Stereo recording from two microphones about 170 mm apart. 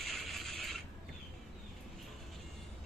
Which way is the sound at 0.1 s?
Centre (ahead or behind).